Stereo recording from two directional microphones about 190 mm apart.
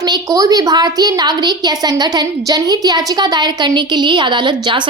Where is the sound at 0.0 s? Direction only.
20° right (ahead or behind).